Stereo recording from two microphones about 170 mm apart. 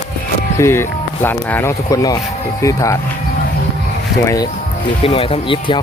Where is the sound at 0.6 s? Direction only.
15° left (ahead or behind).